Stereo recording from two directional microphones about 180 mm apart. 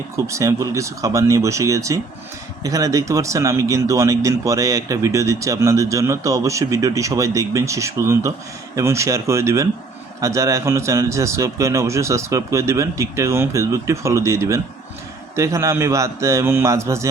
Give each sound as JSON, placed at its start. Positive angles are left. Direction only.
{"t": 0.3, "sound": "speech", "side_deg": -15}